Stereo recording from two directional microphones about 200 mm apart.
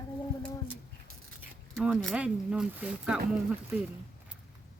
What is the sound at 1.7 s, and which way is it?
Speech, centre (ahead or behind).